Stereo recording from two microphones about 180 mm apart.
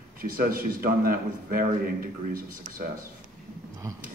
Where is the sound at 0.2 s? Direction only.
50° right (ahead or behind).